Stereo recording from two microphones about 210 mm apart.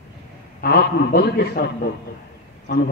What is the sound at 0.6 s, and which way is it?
A man's voice, 45° left (ahead or behind).